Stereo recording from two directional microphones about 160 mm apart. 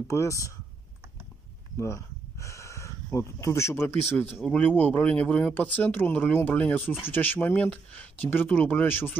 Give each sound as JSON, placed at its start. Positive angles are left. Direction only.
{"t": 0.1, "sound": "speech", "side_deg": 20}
{"t": 1.8, "sound": "speech", "side_deg": 20}